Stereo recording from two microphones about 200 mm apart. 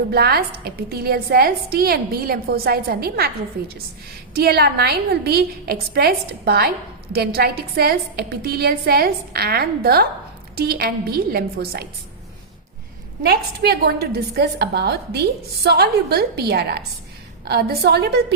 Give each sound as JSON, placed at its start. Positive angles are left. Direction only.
{"t": 0.1, "sound": "a woman's voice", "side_deg": -50}
{"t": 4.4, "sound": "a woman's voice", "side_deg": -50}
{"t": 13.2, "sound": "a woman's voice", "side_deg": -50}